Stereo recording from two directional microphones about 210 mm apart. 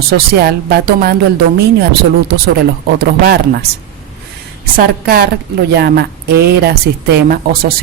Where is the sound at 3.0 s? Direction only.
45° right (ahead or behind).